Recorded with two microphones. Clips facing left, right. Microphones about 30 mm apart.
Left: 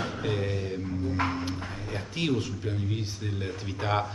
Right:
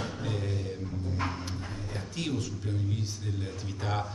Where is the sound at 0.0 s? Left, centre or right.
Left.